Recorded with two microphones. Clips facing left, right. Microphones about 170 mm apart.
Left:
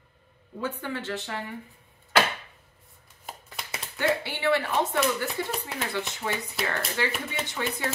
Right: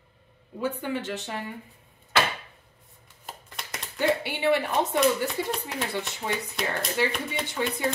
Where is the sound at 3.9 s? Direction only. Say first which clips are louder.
Right 2 dB; 15° right (ahead or behind).